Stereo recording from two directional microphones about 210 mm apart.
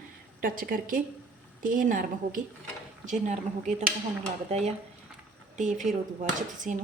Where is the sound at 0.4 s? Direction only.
40° right (ahead or behind).